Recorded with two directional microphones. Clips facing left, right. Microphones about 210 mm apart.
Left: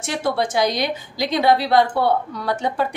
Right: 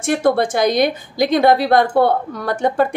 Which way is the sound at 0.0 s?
55° right (ahead or behind).